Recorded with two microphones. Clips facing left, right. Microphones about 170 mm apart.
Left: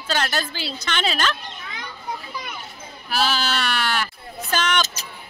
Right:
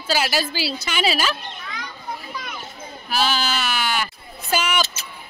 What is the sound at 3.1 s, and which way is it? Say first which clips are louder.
Speech: right 1 dB; centre (ahead or behind).